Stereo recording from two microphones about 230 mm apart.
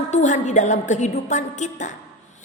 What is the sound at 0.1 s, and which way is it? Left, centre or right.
A woman's voice, left.